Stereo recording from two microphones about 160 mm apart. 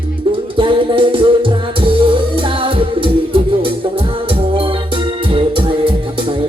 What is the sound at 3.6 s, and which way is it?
Organ, 35° right (ahead or behind).